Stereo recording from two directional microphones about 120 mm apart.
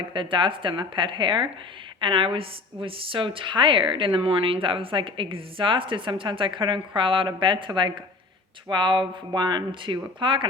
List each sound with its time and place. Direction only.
0.1 s a woman's voice: 45° right (ahead or behind)